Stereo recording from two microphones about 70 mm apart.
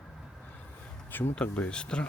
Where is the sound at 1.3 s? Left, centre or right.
Centre.